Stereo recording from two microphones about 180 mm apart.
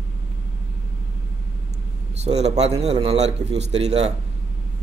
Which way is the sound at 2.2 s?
35° right (ahead or behind).